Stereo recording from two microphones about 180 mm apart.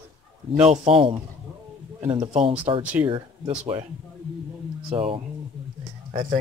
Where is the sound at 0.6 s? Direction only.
35° right (ahead or behind).